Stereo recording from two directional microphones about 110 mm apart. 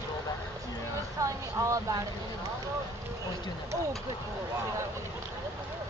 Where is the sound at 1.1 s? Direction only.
30° right (ahead or behind).